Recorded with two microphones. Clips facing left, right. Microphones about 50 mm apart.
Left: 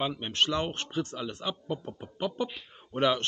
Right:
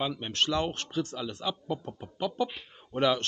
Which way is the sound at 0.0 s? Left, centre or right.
Centre.